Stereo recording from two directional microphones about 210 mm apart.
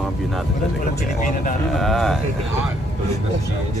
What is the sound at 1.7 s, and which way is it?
Speech, centre (ahead or behind).